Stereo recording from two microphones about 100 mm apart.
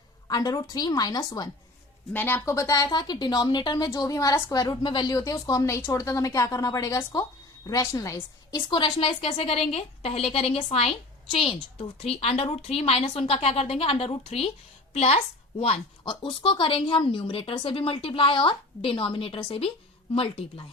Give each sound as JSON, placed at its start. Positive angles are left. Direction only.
{"t": 0.3, "sound": "speech", "side_deg": 40}
{"t": 2.1, "sound": "speech", "side_deg": 20}
{"t": 2.4, "sound": "a woman's voice", "side_deg": 35}
{"t": 3.8, "sound": "speech", "side_deg": 35}
{"t": 4.6, "sound": "a woman's voice", "side_deg": 50}
{"t": 5.1, "sound": "speech", "side_deg": 35}
{"t": 8.7, "sound": "a woman's voice", "side_deg": 60}
{"t": 14.9, "sound": "a woman's voice", "side_deg": 90}
{"t": 16.0, "sound": "a woman's voice", "side_deg": 60}